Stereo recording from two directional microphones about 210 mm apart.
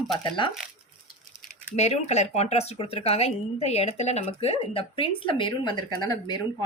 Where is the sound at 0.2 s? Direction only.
20° left (ahead or behind).